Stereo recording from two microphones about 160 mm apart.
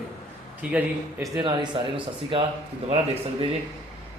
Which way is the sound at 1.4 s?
30° right (ahead or behind).